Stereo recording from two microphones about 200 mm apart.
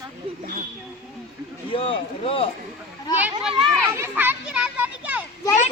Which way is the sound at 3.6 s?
Centre (ahead or behind).